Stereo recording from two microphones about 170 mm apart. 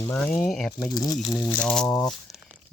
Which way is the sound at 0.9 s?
20° left (ahead or behind).